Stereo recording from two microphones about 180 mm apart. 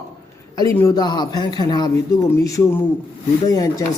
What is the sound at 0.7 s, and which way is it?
A man's voice, 15° left (ahead or behind).